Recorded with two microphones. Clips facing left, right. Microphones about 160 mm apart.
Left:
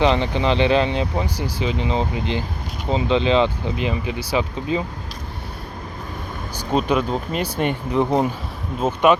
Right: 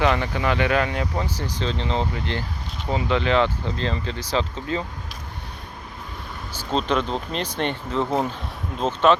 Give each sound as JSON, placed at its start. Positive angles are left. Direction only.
{"t": 0.0, "sound": "speech", "side_deg": 20}
{"t": 6.5, "sound": "speech", "side_deg": 15}